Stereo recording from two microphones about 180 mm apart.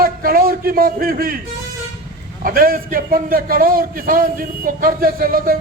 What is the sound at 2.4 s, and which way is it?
A man's voice, 55° right (ahead or behind).